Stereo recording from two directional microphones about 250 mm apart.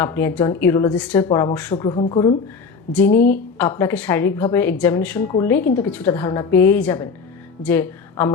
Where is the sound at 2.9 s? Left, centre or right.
Centre.